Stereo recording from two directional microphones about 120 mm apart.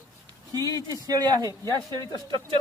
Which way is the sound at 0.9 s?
30° right (ahead or behind).